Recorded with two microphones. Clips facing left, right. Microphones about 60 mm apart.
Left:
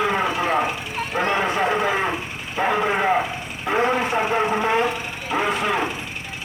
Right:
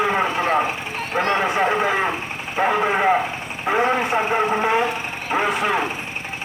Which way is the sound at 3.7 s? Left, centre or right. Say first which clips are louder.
Right 1 dB; right.